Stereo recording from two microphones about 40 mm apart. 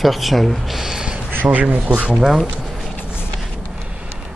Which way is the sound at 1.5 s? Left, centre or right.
Right.